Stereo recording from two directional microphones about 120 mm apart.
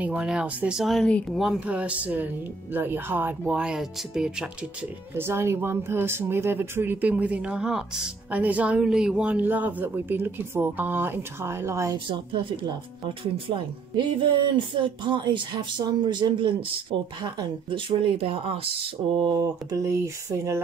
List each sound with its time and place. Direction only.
0.0 s speech: 10° right (ahead or behind)
3.6 s speech: 5° right (ahead or behind)
5.1 s speech: 20° right (ahead or behind)
12.1 s speech: 45° right (ahead or behind)